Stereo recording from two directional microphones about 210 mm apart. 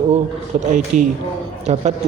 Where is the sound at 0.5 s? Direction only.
35° right (ahead or behind).